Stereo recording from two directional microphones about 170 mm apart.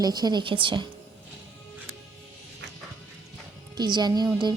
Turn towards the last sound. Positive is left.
turn(degrees=-25)  # may be behind; listen again after turning